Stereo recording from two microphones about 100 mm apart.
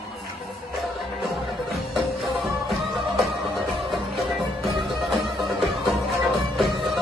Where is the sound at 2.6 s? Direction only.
Centre (ahead or behind).